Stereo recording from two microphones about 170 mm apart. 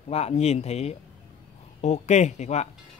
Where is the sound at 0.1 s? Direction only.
35° left (ahead or behind).